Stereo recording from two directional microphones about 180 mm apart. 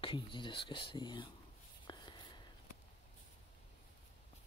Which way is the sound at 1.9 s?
25° left (ahead or behind).